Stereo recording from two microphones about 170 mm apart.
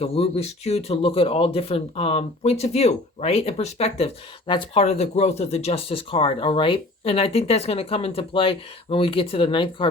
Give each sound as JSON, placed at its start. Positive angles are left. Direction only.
{"t": 0.0, "sound": "speech", "side_deg": 40}